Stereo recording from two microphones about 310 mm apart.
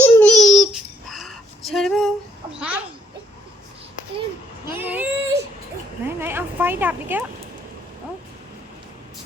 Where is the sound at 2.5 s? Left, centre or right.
Centre.